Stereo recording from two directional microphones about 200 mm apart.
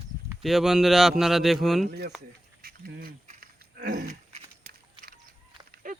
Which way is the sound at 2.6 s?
50° right (ahead or behind).